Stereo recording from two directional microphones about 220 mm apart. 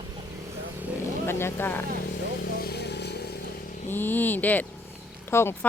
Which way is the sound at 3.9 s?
10° left (ahead or behind).